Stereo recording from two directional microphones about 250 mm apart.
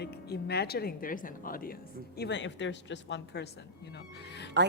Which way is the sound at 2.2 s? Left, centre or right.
Left.